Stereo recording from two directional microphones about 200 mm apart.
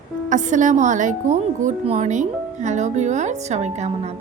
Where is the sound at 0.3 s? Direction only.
40° right (ahead or behind).